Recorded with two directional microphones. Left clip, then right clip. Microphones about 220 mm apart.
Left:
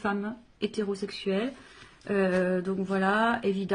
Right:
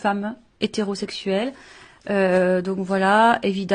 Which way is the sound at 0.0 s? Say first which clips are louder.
Right 8 dB; 45° right (ahead or behind).